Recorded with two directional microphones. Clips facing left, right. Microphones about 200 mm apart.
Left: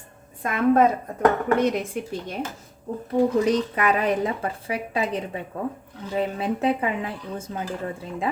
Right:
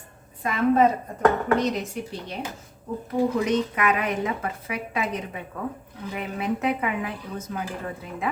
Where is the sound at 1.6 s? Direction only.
50° left (ahead or behind).